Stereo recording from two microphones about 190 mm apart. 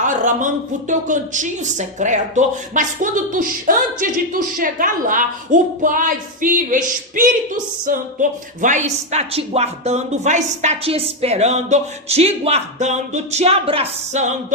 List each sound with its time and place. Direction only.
0.0 s a woman's voice: 40° right (ahead or behind)